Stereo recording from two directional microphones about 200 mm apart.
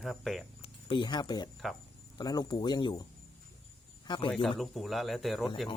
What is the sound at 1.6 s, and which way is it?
Speech, centre (ahead or behind).